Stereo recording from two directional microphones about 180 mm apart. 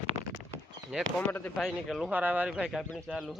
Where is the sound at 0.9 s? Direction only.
5° left (ahead or behind).